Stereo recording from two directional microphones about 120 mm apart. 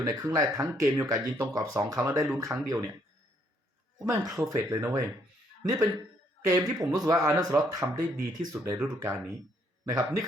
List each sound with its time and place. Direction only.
0.0 s speech: 30° right (ahead or behind)
4.0 s speech: 30° right (ahead or behind)